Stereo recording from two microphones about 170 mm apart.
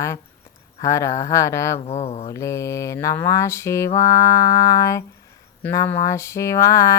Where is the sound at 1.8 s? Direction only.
40° left (ahead or behind).